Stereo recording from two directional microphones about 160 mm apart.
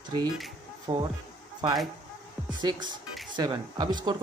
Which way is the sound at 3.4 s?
30° right (ahead or behind).